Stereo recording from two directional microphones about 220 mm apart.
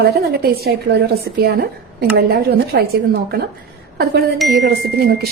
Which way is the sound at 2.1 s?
45° right (ahead or behind).